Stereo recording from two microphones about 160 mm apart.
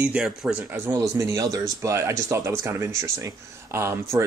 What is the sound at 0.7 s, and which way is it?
A man's voice, 15° right (ahead or behind).